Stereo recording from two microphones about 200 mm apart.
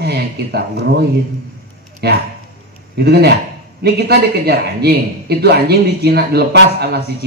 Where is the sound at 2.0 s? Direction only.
55° right (ahead or behind).